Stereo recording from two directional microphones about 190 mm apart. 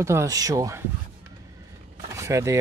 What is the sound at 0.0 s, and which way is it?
Speech, 15° right (ahead or behind).